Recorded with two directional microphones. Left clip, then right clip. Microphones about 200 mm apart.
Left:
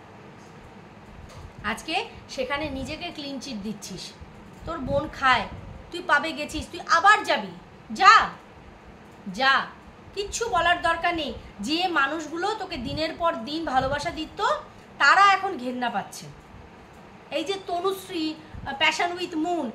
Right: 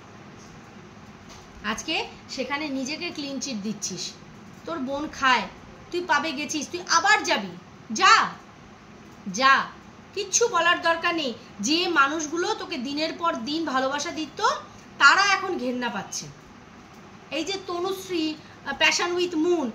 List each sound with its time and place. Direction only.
1.6 s a woman's voice: 5° left (ahead or behind)
9.3 s a woman's voice: 10° left (ahead or behind)
17.3 s a woman's voice: 10° left (ahead or behind)